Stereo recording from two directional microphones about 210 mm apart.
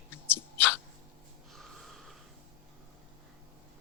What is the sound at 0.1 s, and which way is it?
Hiccup, 10° left (ahead or behind).